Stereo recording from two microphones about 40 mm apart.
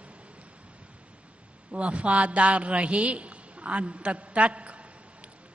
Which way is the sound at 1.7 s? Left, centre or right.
Right.